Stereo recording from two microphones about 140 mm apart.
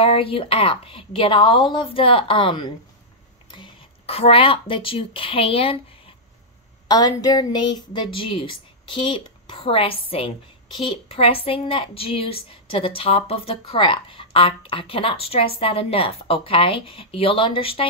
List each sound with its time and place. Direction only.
0.0 s a woman's voice: 40° left (ahead or behind)
6.9 s a woman's voice: 30° left (ahead or behind)